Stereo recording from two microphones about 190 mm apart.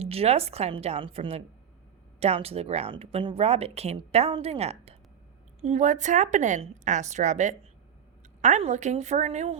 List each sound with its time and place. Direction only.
0.0 s speech: 30° right (ahead or behind)